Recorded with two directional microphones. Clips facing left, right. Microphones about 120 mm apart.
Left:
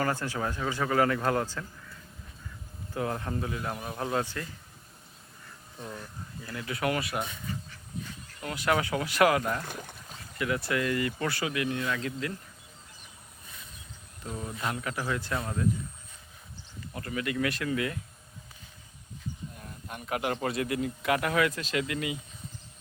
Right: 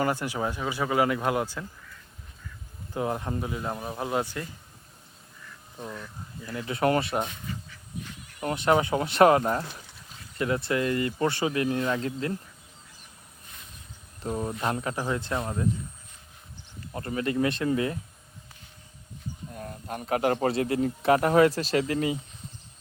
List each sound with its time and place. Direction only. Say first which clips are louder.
0.0 s speech: right 3 dB; 15° right (ahead or behind)
2.9 s a man's voice: right 3 dB; 20° right (ahead or behind)
6.4 s a man's voice: right 5 dB; 25° right (ahead or behind)
8.4 s a man's voice: right 5 dB; 25° right (ahead or behind)
9.6 s speech: left 3 dB; 50° left (ahead or behind)
10.3 s a man's voice: right 3 dB; 30° right (ahead or behind)
14.3 s a man's voice: right 6 dB; 35° right (ahead or behind)
16.9 s a man's voice: right 4 dB; 35° right (ahead or behind)
19.5 s a man's voice: right 7 dB; 45° right (ahead or behind)